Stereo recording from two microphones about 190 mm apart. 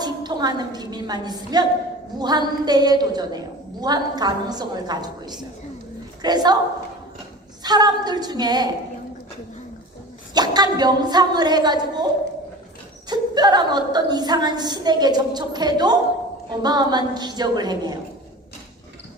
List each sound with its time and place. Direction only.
0.0 s a woman's voice: 20° right (ahead or behind)
7.6 s a woman's voice: 20° right (ahead or behind)
10.3 s a woman's voice: 20° right (ahead or behind)
13.1 s a woman's voice: 20° right (ahead or behind)